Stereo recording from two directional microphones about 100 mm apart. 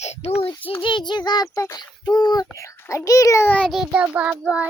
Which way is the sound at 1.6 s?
45° left (ahead or behind).